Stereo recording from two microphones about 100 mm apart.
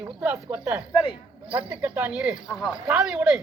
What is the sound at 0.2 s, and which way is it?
Speech, 20° right (ahead or behind).